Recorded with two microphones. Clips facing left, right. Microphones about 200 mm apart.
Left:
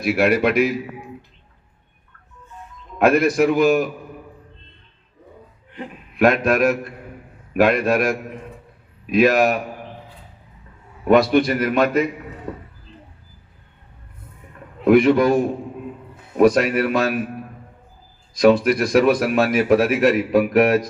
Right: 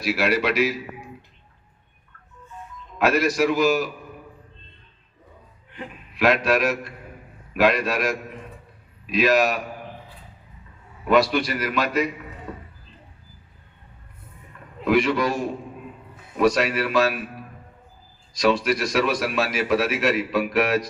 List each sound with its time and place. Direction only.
0.0 s a man's voice: 55° left (ahead or behind)
3.0 s a man's voice: 55° left (ahead or behind)
6.2 s a man's voice: 55° left (ahead or behind)
9.1 s a man's voice: 55° left (ahead or behind)
11.1 s a man's voice: 55° left (ahead or behind)
14.8 s a man's voice: 55° left (ahead or behind)
18.3 s a man's voice: 55° left (ahead or behind)